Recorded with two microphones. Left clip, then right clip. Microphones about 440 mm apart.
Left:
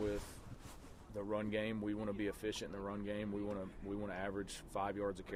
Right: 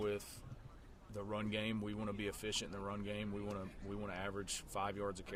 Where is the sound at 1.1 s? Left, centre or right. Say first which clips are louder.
Left 2 dB; right.